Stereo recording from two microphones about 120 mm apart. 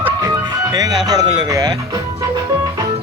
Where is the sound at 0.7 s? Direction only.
35° right (ahead or behind).